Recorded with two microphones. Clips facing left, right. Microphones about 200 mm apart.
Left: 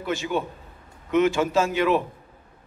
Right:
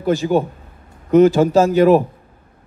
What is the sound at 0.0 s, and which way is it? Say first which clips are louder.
A man's voice: right 10 dB; 35° right (ahead or behind).